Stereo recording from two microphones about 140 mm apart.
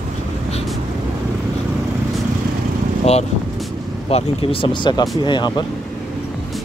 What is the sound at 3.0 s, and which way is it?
Speech, 50° left (ahead or behind).